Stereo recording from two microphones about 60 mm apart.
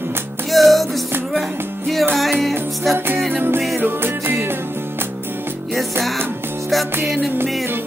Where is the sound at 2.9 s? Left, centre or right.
Right.